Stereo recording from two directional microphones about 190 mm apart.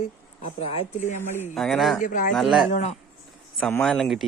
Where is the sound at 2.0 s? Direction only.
45° left (ahead or behind).